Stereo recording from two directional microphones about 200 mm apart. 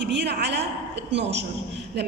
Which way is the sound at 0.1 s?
60° right (ahead or behind).